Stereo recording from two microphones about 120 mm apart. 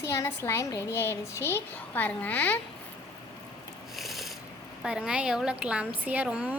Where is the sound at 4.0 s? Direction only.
Centre (ahead or behind).